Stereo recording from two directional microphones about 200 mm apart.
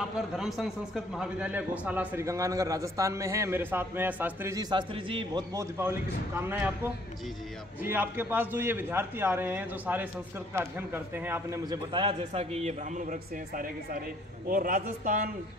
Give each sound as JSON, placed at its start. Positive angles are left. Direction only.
{"t": 0.4, "sound": "a man's voice", "side_deg": 0}
{"t": 11.9, "sound": "a man's voice", "side_deg": -25}